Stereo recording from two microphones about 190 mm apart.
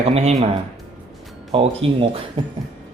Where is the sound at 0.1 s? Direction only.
35° right (ahead or behind).